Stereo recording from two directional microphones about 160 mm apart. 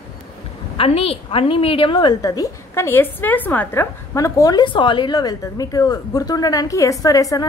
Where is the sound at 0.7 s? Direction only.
40° left (ahead or behind).